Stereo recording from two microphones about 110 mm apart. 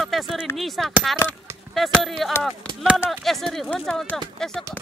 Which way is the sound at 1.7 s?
Centre (ahead or behind).